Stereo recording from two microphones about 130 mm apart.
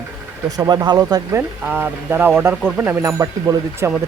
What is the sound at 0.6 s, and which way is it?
Speech, 30° right (ahead or behind).